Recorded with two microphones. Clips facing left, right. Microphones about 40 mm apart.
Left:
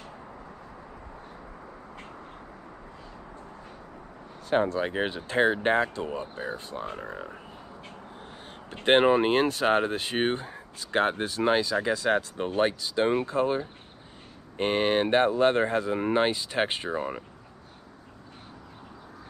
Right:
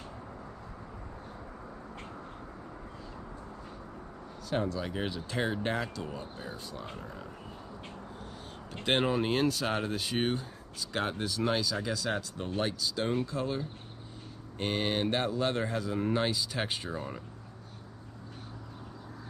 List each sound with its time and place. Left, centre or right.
4.5 s speech: left
8.8 s speech: left